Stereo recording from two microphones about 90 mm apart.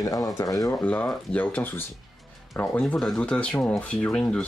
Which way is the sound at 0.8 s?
15° left (ahead or behind).